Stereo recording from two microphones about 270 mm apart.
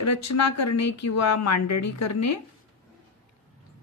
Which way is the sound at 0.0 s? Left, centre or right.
Left.